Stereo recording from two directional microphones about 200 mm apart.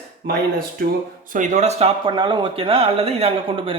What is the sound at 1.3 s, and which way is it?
Speech, 40° right (ahead or behind).